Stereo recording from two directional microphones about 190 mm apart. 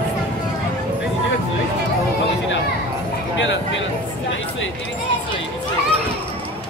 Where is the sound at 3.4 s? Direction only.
70° left (ahead or behind).